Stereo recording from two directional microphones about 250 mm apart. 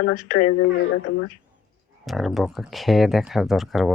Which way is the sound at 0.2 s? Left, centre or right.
Left.